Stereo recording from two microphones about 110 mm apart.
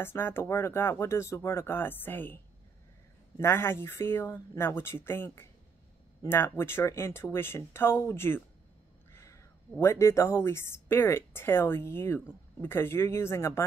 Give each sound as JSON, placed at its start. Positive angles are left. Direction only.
{"t": 0.0, "sound": "a woman's voice", "side_deg": 20}